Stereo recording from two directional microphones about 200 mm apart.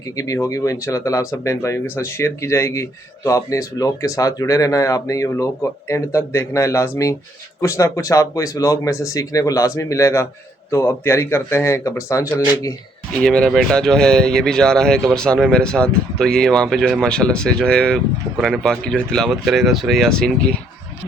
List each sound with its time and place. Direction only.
0.2 s speech: 15° left (ahead or behind)